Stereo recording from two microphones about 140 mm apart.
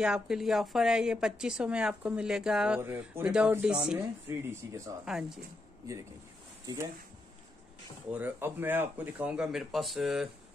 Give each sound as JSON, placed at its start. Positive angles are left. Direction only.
{"t": 0.0, "sound": "a woman's voice", "side_deg": -5}
{"t": 2.8, "sound": "speech", "side_deg": -15}
{"t": 4.0, "sound": "speech", "side_deg": -20}
{"t": 5.0, "sound": "a woman's voice", "side_deg": -5}
{"t": 6.6, "sound": "speech", "side_deg": -25}
{"t": 8.1, "sound": "speech", "side_deg": -15}